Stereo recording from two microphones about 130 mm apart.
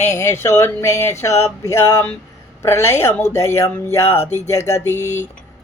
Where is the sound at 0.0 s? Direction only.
20° left (ahead or behind).